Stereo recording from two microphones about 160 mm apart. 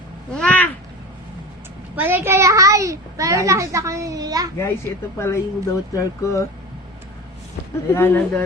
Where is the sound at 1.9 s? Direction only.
15° right (ahead or behind).